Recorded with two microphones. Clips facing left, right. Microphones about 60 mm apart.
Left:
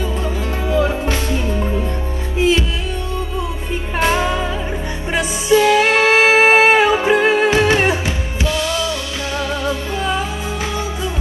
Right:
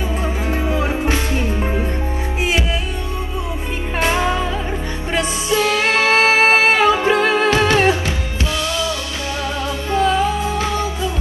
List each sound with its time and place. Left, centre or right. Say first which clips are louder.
0.7 s music: left 4 dB; right
4.1 s music: even; centre
5.1 s music: left 4 dB; left